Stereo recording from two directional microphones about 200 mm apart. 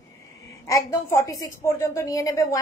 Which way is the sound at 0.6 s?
15° left (ahead or behind).